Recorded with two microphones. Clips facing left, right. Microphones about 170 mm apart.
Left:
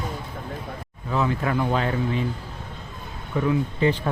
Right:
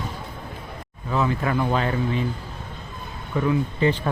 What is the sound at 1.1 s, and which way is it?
Speech, centre (ahead or behind).